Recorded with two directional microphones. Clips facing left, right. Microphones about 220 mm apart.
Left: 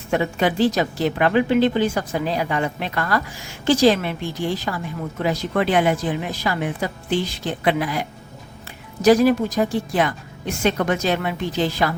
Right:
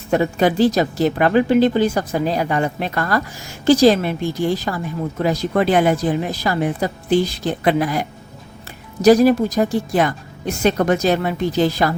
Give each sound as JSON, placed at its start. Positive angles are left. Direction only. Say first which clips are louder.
{"t": 0.1, "sound": "speech", "louder": "right 4 dB", "side_deg": -40}